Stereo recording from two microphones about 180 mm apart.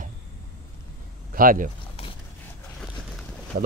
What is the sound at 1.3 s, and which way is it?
Speech, 50° right (ahead or behind).